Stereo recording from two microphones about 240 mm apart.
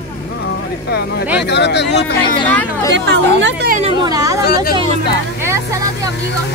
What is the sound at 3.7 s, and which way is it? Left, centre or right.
Speech, right.